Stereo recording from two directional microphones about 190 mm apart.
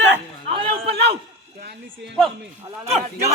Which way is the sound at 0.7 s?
55° right (ahead or behind).